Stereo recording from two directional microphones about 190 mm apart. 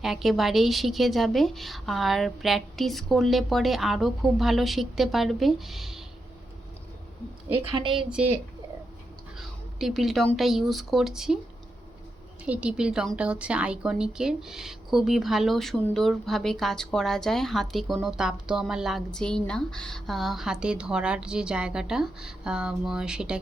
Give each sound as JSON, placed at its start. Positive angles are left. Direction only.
{"t": 0.0, "sound": "a woman's voice", "side_deg": 0}
{"t": 7.5, "sound": "a woman's voice", "side_deg": -25}
{"t": 8.1, "sound": "speech", "side_deg": -10}
{"t": 9.7, "sound": "a woman's voice", "side_deg": 0}
{"t": 12.5, "sound": "a woman's voice", "side_deg": -5}